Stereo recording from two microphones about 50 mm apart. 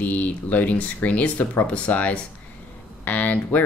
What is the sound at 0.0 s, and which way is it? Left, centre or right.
Speech, left.